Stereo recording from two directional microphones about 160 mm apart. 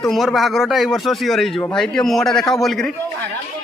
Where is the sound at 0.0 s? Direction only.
Centre (ahead or behind).